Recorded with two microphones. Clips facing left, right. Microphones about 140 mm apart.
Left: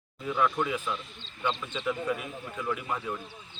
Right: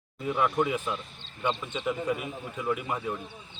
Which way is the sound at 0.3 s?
10° right (ahead or behind).